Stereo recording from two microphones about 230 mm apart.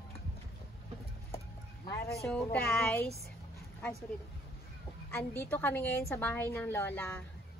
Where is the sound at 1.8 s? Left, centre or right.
Centre.